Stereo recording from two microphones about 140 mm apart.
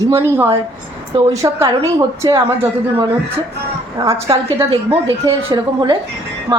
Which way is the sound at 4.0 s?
30° right (ahead or behind).